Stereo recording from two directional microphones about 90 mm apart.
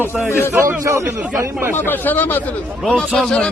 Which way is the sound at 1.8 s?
20° left (ahead or behind).